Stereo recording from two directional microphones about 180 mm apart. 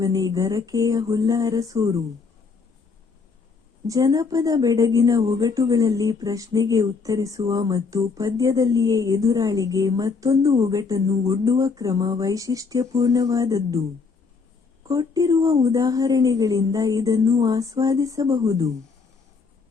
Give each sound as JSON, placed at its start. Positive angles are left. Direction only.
{"t": 0.0, "sound": "a woman's voice", "side_deg": -20}
{"t": 3.8, "sound": "a woman's voice", "side_deg": -20}
{"t": 14.8, "sound": "a woman's voice", "side_deg": -20}